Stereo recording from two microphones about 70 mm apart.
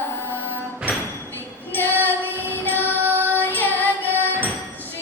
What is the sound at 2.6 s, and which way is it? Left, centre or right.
Child singing, left.